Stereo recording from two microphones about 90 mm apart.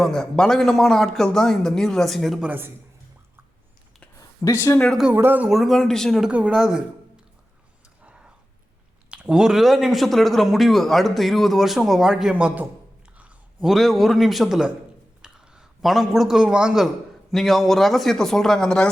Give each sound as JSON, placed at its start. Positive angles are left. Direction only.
{"t": 0.0, "sound": "speech", "side_deg": 5}
{"t": 2.4, "sound": "a man's voice", "side_deg": -20}
{"t": 4.2, "sound": "a sound", "side_deg": 35}
{"t": 5.1, "sound": "a man's voice", "side_deg": -20}
{"t": 5.5, "sound": "speech", "side_deg": 0}
{"t": 6.2, "sound": "speech", "side_deg": -10}
{"t": 8.0, "sound": "a sound", "side_deg": -10}
{"t": 9.0, "sound": "speech", "side_deg": -10}
{"t": 12.3, "sound": "speech", "side_deg": -15}
{"t": 13.1, "sound": "a sound", "side_deg": -15}
{"t": 13.7, "sound": "a man's voice", "side_deg": 0}